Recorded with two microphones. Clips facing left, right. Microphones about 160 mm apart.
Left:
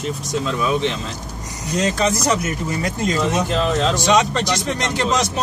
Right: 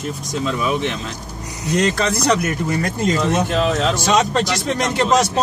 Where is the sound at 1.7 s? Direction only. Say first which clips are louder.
Right 1 dB; 65° right (ahead or behind).